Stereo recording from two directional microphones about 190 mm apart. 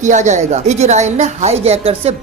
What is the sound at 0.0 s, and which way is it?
Speech, 40° right (ahead or behind).